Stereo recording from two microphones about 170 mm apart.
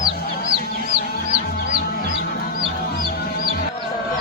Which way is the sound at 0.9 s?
55° left (ahead or behind).